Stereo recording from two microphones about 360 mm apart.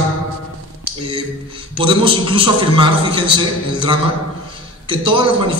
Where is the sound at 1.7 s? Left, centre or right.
Centre.